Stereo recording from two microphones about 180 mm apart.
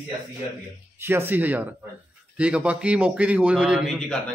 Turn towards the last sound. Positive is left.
turn(degrees=5)  # may be behind; listen again after turning